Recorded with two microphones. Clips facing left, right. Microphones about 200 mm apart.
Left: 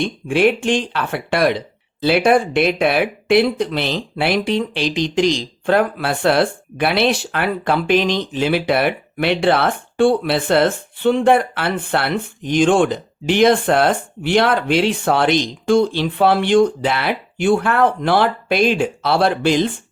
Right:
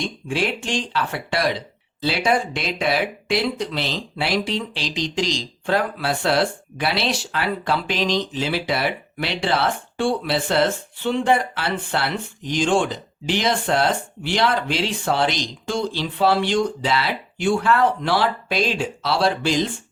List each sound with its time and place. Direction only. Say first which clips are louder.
0.0 s speech: left 8 dB; 60° left (ahead or behind)